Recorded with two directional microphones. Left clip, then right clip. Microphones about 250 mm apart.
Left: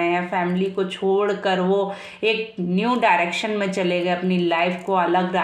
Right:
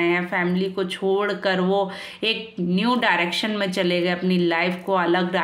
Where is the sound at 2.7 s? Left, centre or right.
Right.